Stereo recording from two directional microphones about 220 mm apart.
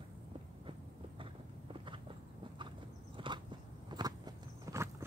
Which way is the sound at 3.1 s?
20° right (ahead or behind).